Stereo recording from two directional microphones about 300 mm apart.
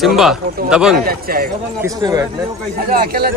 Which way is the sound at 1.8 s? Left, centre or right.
Centre.